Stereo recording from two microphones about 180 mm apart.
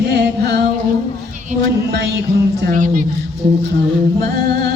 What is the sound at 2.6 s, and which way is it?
Speech, 45° right (ahead or behind).